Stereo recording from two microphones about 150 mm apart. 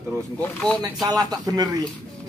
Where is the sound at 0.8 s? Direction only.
25° right (ahead or behind).